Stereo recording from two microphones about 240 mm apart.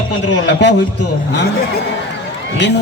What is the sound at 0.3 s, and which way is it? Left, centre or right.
Speech, left.